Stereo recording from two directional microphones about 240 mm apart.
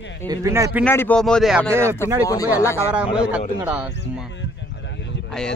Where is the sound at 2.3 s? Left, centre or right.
Centre.